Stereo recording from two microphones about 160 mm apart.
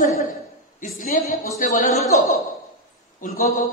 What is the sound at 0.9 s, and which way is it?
Speech, 55° left (ahead or behind).